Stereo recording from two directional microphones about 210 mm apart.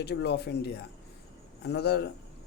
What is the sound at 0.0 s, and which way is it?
Speech, 50° left (ahead or behind).